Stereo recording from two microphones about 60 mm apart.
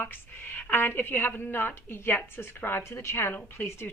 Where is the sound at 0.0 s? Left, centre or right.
Left.